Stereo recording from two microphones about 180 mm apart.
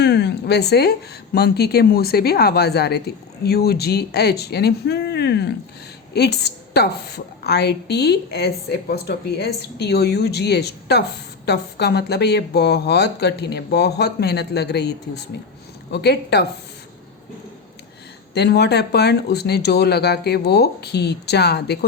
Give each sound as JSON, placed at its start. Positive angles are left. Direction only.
{"t": 0.0, "sound": "a woman's voice", "side_deg": 65}
{"t": 18.3, "sound": "a woman's voice", "side_deg": 65}